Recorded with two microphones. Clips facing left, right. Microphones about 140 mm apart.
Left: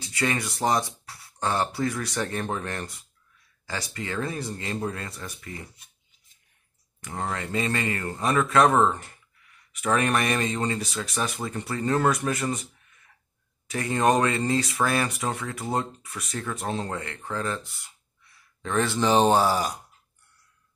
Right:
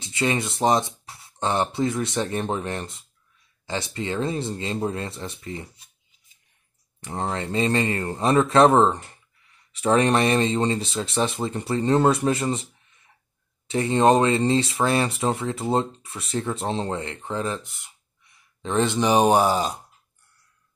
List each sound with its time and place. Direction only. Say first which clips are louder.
0.0 s speech: right 3 dB; 25° right (ahead or behind)
7.0 s speech: right 3 dB; 30° right (ahead or behind)